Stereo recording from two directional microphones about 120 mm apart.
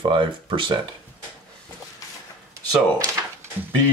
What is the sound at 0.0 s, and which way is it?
Speech, 45° right (ahead or behind).